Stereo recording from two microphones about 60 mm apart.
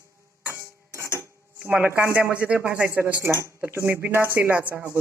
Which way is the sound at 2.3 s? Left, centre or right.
Right.